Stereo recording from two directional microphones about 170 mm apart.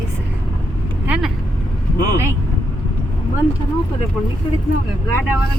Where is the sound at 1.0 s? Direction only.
5° right (ahead or behind).